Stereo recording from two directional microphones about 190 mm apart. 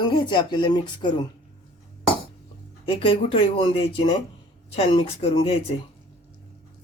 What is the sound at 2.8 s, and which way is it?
Speech, 30° left (ahead or behind).